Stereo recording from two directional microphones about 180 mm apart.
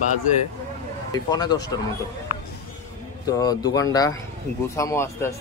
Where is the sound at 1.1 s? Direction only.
20° left (ahead or behind).